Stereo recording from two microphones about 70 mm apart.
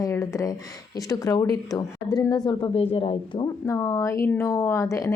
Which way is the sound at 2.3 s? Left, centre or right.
Left.